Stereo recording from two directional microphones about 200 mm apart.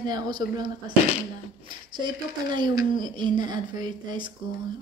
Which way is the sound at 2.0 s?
20° right (ahead or behind).